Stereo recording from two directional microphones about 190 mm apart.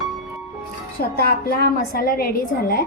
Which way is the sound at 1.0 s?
55° left (ahead or behind).